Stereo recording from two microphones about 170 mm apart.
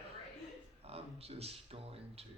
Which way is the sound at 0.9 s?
35° right (ahead or behind).